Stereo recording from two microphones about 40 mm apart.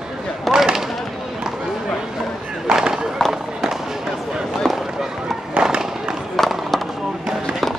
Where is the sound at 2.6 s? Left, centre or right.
Centre.